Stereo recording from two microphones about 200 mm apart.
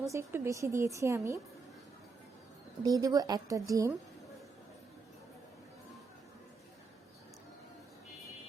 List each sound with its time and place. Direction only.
0.0 s a woman's voice: 15° right (ahead or behind)
2.8 s a woman's voice: 20° right (ahead or behind)